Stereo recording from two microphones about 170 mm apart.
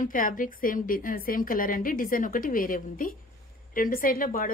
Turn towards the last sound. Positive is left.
turn(degrees=55)  # may be behind; listen again after turning